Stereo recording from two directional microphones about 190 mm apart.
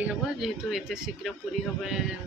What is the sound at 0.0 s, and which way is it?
A man's voice, centre (ahead or behind).